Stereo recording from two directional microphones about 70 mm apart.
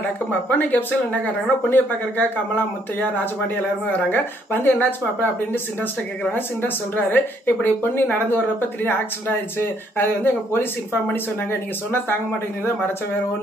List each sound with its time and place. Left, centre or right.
0.0 s speech: left
4.1 s speech: left